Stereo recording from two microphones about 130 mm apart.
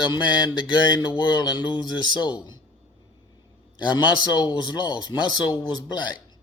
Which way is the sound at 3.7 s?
35° left (ahead or behind).